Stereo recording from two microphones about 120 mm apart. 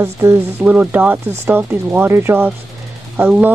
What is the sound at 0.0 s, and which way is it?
Speech, 20° right (ahead or behind).